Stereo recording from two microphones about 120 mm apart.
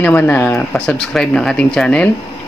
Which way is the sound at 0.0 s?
15° left (ahead or behind).